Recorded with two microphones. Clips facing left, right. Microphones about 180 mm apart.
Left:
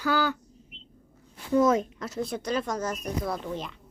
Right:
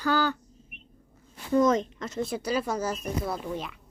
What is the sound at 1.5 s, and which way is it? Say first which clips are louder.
Speech: even; 5° left (ahead or behind).